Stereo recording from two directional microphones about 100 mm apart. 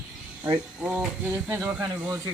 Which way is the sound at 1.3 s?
20° right (ahead or behind).